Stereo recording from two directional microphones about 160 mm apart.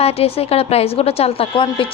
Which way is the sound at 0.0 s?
40° left (ahead or behind).